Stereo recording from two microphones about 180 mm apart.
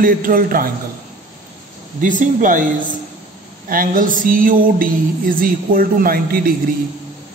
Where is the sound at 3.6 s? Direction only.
50° right (ahead or behind).